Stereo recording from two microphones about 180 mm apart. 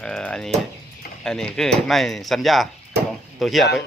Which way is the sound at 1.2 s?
5° left (ahead or behind).